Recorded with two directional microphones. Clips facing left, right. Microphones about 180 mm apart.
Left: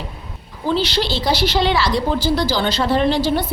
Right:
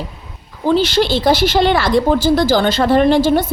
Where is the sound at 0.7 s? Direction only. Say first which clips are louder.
Right 6 dB; 50° right (ahead or behind).